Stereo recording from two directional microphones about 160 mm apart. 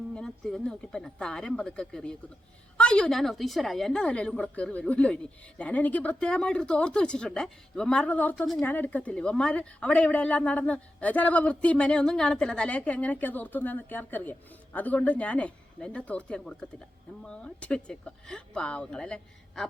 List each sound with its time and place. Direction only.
0.1 s a woman's voice: 5° left (ahead or behind)